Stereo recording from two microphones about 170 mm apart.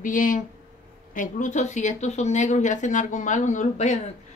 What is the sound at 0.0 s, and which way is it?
Speech, 50° left (ahead or behind).